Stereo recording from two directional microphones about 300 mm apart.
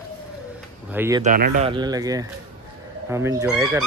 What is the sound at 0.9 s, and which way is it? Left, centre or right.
Speech, centre.